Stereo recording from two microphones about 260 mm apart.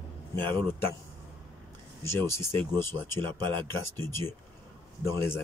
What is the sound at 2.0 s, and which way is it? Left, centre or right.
Speech, centre.